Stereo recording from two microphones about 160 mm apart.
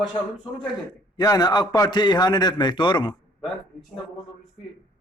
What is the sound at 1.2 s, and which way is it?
A man's voice, 25° left (ahead or behind).